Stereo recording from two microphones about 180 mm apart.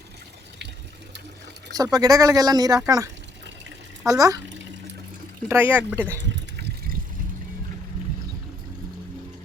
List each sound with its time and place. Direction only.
1.7 s speech: 20° right (ahead or behind)
4.4 s water: 90° right
5.5 s speech: 10° right (ahead or behind)
6.3 s liquid: 65° right (ahead or behind)